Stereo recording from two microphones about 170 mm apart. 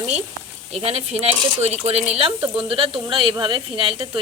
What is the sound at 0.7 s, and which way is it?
Speech, 35° right (ahead or behind).